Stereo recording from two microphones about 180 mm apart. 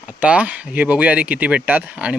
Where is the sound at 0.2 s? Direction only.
10° right (ahead or behind).